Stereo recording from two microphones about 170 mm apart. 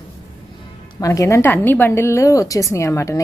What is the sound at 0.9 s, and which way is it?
A woman's voice, 20° left (ahead or behind).